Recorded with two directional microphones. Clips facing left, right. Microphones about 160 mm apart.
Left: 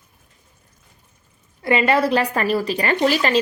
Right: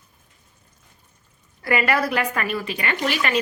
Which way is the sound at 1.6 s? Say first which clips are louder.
Left 4 dB; 25° left (ahead or behind).